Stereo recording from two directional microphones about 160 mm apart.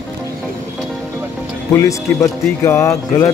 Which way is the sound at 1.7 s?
20° left (ahead or behind).